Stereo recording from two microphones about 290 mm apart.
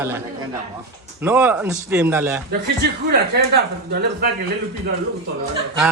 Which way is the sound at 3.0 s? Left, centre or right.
Right.